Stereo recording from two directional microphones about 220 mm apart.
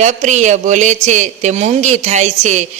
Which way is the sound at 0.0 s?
35° right (ahead or behind).